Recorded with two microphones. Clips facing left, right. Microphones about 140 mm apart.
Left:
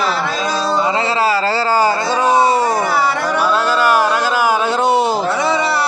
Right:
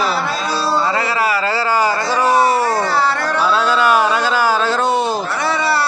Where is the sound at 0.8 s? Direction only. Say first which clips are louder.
Left 2 dB; 20° left (ahead or behind).